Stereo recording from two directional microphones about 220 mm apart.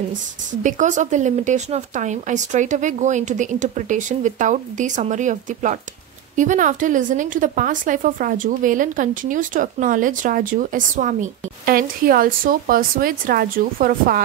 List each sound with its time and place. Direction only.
0.7 s a woman's voice: 35° right (ahead or behind)